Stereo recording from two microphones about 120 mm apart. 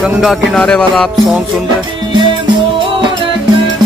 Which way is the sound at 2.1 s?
40° right (ahead or behind).